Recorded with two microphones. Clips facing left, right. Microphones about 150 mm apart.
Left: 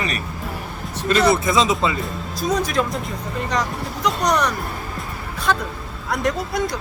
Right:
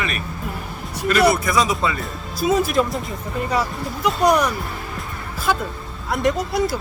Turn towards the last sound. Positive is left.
turn(degrees=0)  # may be behind; listen again after turning